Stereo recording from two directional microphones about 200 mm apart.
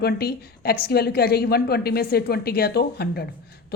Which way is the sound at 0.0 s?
50° left (ahead or behind).